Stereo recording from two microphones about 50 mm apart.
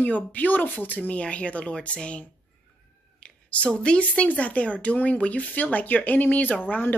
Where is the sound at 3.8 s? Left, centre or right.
Left.